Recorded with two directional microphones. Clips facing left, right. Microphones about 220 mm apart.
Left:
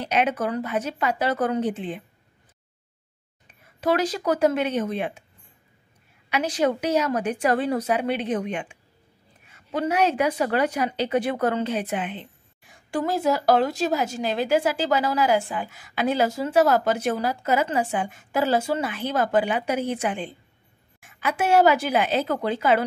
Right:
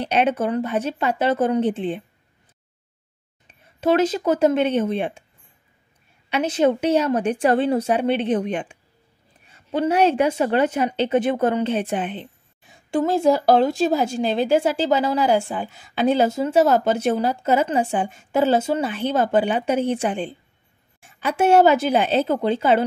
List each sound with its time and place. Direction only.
0.0 s speech: 30° right (ahead or behind)
3.8 s speech: 25° right (ahead or behind)
6.3 s speech: 25° right (ahead or behind)